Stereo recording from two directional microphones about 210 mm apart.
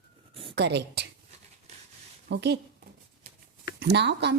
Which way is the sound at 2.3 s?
55° right (ahead or behind).